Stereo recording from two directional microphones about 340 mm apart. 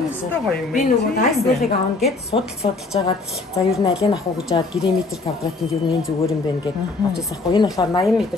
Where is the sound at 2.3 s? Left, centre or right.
Centre.